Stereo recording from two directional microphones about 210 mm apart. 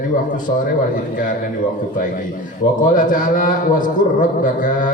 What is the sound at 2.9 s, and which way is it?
A man's voice, 40° left (ahead or behind).